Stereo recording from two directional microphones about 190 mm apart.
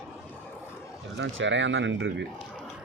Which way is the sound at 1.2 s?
75° right (ahead or behind).